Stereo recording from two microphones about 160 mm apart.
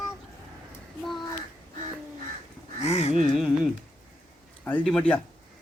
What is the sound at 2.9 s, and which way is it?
Speech, 45° left (ahead or behind).